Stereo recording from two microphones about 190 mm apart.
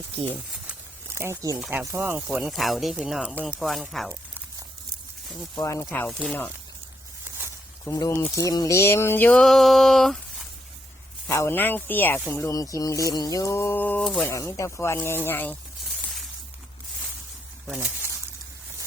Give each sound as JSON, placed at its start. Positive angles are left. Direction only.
{"t": 0.7, "sound": "a sound", "side_deg": -15}
{"t": 1.5, "sound": "speech", "side_deg": 0}
{"t": 1.8, "sound": "speech", "side_deg": -15}
{"t": 5.5, "sound": "speech", "side_deg": 15}
{"t": 7.9, "sound": "speech", "side_deg": 20}
{"t": 11.3, "sound": "speech", "side_deg": 10}
{"t": 16.0, "sound": "shatter", "side_deg": 5}
{"t": 17.7, "sound": "speech", "side_deg": -10}